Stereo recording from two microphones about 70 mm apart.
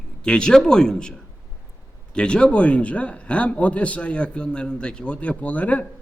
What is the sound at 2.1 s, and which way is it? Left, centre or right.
A man's voice, centre.